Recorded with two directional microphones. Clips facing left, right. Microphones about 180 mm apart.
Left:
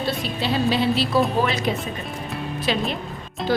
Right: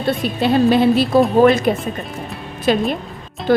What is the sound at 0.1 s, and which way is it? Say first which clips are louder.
A woman's voice: right 11 dB; 55° right (ahead or behind).